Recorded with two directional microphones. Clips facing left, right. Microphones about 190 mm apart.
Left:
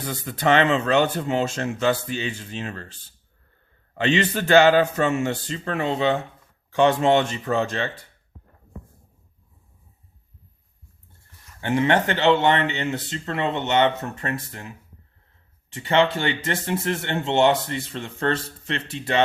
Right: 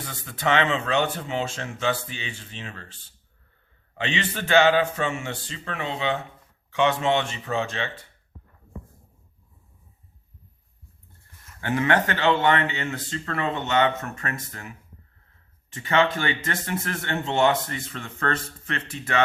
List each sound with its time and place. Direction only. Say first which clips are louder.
0.1 s speech: left 4 dB; 40° left (ahead or behind)
11.6 s speech: left 2 dB; 25° left (ahead or behind)
15.8 s speech: left 2 dB; 30° left (ahead or behind)